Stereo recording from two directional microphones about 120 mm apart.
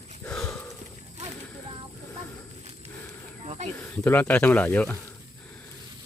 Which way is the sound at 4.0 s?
15° left (ahead or behind).